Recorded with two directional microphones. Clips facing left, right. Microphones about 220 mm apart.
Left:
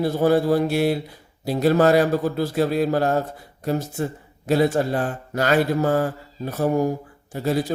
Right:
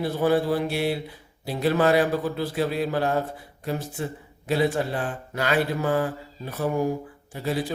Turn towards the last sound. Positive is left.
turn(degrees=45)  # may be behind; listen again after turning